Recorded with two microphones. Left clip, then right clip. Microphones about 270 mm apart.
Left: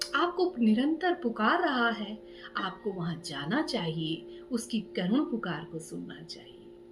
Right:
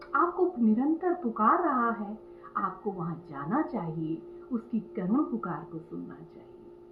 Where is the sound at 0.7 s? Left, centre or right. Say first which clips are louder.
Even; left.